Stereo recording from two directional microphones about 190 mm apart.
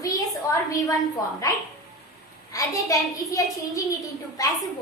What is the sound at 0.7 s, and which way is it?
Speech, 20° left (ahead or behind).